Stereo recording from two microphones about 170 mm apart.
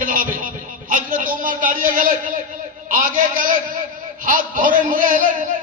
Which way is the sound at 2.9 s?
55° right (ahead or behind).